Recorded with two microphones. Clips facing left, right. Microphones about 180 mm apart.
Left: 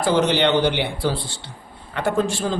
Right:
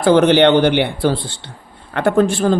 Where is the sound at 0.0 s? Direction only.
60° right (ahead or behind).